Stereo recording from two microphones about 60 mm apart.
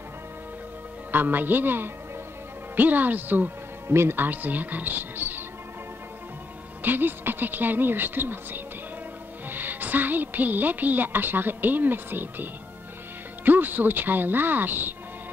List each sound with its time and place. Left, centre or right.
1.1 s a woman's voice: right
6.8 s a woman's voice: right